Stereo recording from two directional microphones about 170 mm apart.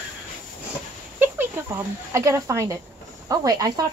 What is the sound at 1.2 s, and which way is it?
Speech, 15° right (ahead or behind).